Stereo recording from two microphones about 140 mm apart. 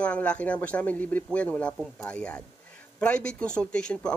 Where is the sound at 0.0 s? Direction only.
10° left (ahead or behind).